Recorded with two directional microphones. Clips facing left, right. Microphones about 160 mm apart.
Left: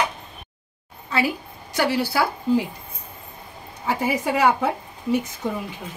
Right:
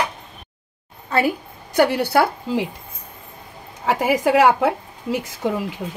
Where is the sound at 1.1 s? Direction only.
50° right (ahead or behind).